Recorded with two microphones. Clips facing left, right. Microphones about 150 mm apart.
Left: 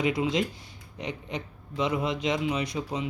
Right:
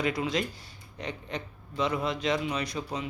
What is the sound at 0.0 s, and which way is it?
A man's voice, 20° left (ahead or behind).